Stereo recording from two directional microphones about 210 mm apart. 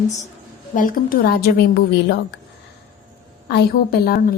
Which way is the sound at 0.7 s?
40° left (ahead or behind).